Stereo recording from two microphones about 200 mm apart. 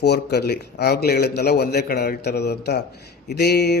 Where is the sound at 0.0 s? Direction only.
55° left (ahead or behind).